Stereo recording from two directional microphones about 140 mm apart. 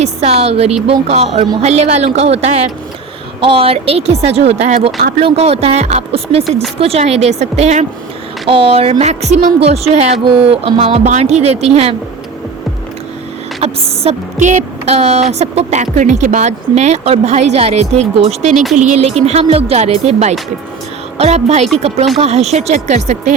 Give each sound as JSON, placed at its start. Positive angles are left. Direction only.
{"t": 0.0, "sound": "speech", "side_deg": -50}
{"t": 8.4, "sound": "speech", "side_deg": -40}
{"t": 10.2, "sound": "speech", "side_deg": -40}
{"t": 13.6, "sound": "a sound", "side_deg": -45}
{"t": 15.3, "sound": "speech", "side_deg": -50}